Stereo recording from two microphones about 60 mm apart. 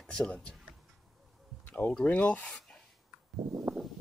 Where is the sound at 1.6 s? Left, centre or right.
Left.